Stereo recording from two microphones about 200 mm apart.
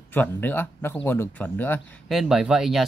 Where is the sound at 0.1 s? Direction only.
10° left (ahead or behind).